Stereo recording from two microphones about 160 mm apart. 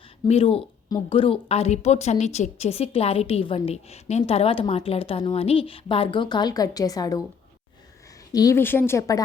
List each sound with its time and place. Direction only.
0.3 s a woman's voice: 40° left (ahead or behind); by 7.2 s 20° left (ahead or behind)
8.3 s a woman's voice: 20° left (ahead or behind)